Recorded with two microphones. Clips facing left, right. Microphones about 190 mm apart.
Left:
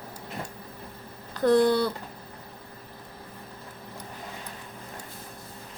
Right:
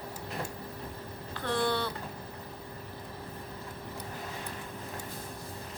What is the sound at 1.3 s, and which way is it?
Speech, 40° left (ahead or behind).